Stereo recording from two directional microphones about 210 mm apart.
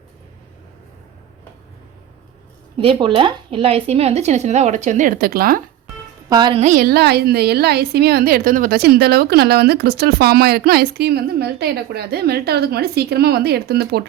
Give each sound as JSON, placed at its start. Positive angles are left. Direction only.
{"t": 2.7, "sound": "speech", "side_deg": -25}
{"t": 6.2, "sound": "a woman's voice", "side_deg": -20}